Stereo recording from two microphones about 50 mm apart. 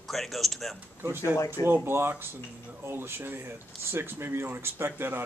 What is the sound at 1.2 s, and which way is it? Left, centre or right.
Speech, left.